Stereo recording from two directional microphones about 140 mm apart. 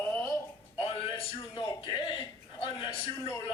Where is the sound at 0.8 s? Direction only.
40° left (ahead or behind).